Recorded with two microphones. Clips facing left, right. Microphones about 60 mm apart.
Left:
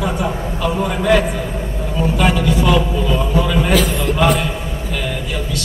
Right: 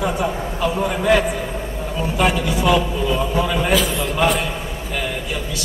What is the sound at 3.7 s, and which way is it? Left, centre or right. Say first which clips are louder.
Speech: left 2 dB; left.